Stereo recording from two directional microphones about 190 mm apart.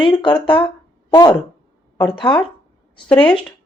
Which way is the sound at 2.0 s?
25° left (ahead or behind).